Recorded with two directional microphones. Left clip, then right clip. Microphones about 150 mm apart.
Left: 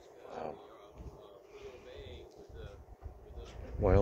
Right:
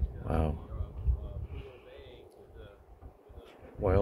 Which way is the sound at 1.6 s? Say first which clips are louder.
Left 4 dB; 50° left (ahead or behind).